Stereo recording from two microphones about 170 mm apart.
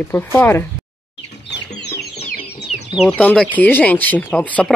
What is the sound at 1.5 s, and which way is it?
Chicken, 80° left.